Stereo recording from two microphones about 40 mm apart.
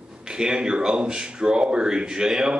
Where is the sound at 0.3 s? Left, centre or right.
Right.